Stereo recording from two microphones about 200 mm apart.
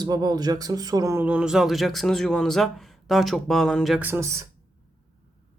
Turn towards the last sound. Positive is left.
turn(degrees=-15)  # may be behind; listen again after turning